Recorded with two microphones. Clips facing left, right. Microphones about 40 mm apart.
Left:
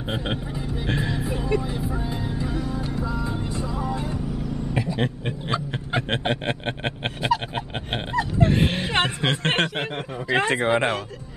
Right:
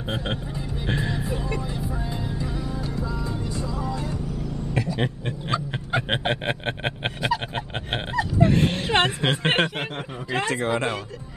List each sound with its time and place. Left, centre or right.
0.8 s music: centre
3.3 s vehicle: left
4.7 s a sound: centre
5.2 s snicker: centre
6.2 s speech: centre
7.2 s dog: centre
8.6 s a sound: centre
8.9 s speech: centre
10.3 s speech: left